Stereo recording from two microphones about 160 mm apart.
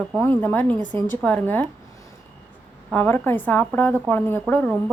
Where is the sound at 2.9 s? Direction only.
10° left (ahead or behind).